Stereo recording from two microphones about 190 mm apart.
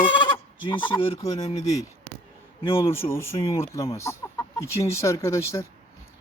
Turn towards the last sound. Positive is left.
turn(degrees=15)  # may be behind; listen again after turning